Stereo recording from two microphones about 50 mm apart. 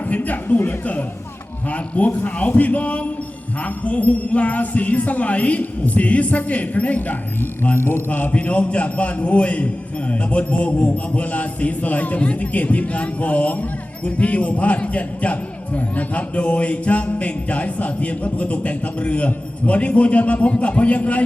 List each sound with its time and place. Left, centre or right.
0.1 s a man's voice: left
7.8 s mechanisms: left
8.3 s a man's voice: left